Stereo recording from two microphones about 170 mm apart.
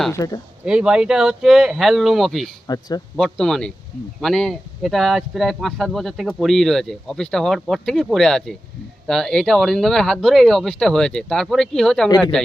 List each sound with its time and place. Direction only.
0.1 s speech: 20° left (ahead or behind)
0.6 s speech: 5° right (ahead or behind)
2.6 s speech: 20° left (ahead or behind)
3.2 s speech: 5° left (ahead or behind)